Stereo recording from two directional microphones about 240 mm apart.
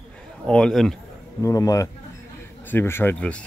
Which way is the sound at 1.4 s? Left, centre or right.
Centre.